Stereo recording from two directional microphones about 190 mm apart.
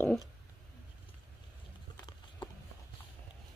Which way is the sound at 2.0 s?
20° left (ahead or behind).